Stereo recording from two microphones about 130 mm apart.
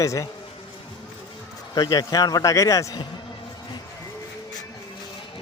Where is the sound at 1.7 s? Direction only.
30° left (ahead or behind).